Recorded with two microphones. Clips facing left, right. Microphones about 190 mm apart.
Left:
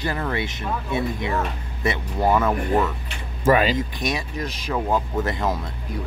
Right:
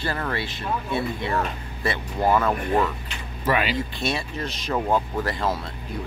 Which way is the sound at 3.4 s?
40° left (ahead or behind).